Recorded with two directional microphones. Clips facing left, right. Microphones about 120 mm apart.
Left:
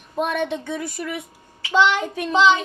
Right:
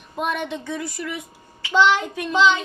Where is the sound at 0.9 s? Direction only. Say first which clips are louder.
Left 1 dB; 55° left (ahead or behind).